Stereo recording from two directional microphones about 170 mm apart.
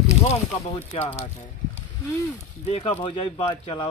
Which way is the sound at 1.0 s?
40° left (ahead or behind).